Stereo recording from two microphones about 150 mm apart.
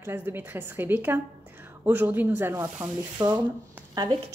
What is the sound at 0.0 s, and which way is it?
A woman's voice, 15° right (ahead or behind).